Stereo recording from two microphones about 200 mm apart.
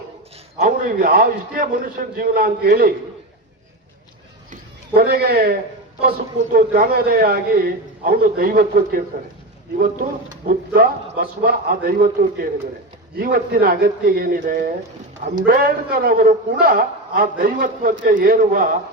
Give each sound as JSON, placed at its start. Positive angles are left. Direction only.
{"t": 0.6, "sound": "a man's voice", "side_deg": -45}
{"t": 4.9, "sound": "a man's voice", "side_deg": -50}
{"t": 10.4, "sound": "a man's voice", "side_deg": -45}